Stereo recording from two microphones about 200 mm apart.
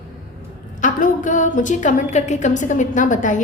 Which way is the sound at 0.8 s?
40° left (ahead or behind).